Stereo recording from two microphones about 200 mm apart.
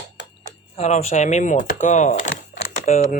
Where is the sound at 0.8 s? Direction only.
35° left (ahead or behind).